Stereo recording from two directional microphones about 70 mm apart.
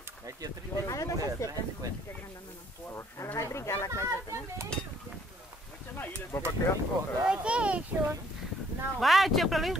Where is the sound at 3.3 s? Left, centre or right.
Left.